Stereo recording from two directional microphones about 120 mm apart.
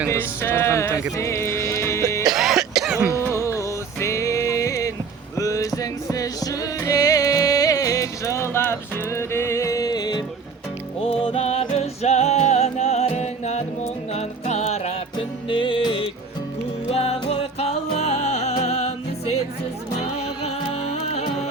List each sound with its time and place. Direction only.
0.1 s speech: 20° left (ahead or behind)
1.1 s music: 25° left (ahead or behind)
2.2 s cough: 5° right (ahead or behind)
3.3 s music: 25° left (ahead or behind)
11.0 s music: 50° left (ahead or behind); by 14.9 s 65° left (ahead or behind)
15.1 s music: 45° left (ahead or behind)
16.9 s music: 60° left (ahead or behind)